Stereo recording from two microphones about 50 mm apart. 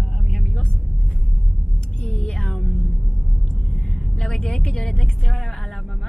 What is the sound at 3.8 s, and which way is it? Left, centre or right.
A woman's voice, centre.